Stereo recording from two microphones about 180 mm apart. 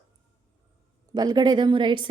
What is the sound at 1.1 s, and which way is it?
Speech, 20° right (ahead or behind).